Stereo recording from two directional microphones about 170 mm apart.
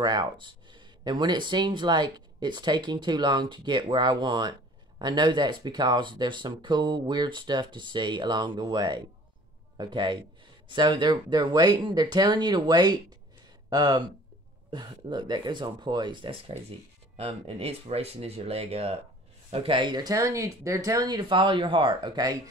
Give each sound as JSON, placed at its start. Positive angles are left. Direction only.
{"t": 0.0, "sound": "speech", "side_deg": -25}